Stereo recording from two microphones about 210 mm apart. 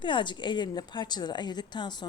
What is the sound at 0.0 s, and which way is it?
A woman's voice, 20° left (ahead or behind).